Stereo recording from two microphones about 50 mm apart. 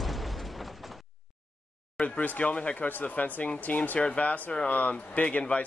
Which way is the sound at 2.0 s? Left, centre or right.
Left.